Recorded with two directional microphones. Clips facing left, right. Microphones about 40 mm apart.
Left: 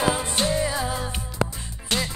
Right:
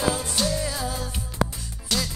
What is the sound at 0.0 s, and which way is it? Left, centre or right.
Music, left.